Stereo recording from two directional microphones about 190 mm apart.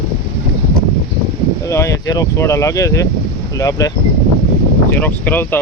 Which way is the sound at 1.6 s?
15° left (ahead or behind).